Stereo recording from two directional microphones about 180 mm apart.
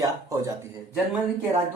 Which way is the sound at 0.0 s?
15° right (ahead or behind).